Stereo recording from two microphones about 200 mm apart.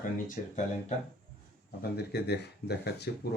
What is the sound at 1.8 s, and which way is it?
Speech, 55° left (ahead or behind).